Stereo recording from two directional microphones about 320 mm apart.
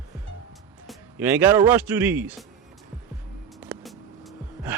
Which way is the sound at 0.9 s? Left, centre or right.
Centre.